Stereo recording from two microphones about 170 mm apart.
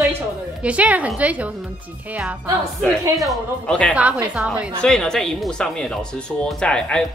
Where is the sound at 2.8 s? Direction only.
5° left (ahead or behind).